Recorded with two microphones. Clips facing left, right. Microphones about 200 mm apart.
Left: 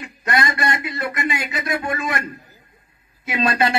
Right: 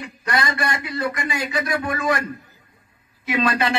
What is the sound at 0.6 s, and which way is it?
A man's voice, 25° left (ahead or behind).